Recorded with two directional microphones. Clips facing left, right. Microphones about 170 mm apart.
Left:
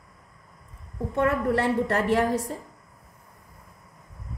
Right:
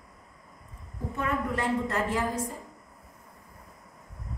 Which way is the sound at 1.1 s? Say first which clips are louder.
Left 7 dB; 70° left (ahead or behind).